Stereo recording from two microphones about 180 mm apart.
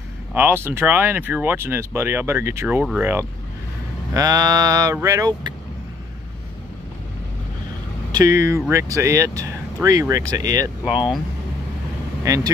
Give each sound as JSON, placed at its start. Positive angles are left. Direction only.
{"t": 0.3, "sound": "speech", "side_deg": -10}
{"t": 4.1, "sound": "mantra", "side_deg": -20}
{"t": 4.9, "sound": "speech", "side_deg": -15}
{"t": 8.1, "sound": "speech", "side_deg": -20}
{"t": 9.8, "sound": "mantra", "side_deg": -20}
{"t": 12.3, "sound": "speech", "side_deg": -15}